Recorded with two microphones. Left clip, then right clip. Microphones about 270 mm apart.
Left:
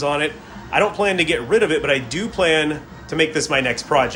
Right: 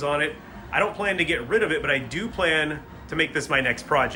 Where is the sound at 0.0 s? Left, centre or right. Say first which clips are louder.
Left 4 dB; centre.